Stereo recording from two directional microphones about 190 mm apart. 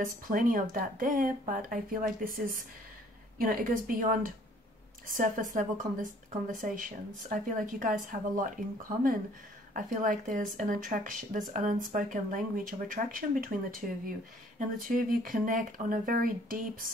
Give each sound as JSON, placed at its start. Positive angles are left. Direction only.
{"t": 0.0, "sound": "speech", "side_deg": -45}